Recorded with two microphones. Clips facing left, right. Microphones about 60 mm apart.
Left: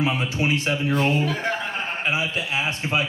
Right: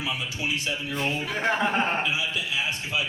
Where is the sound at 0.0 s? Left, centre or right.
Left.